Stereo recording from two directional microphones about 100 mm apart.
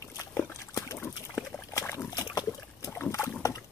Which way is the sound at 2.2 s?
30° left (ahead or behind).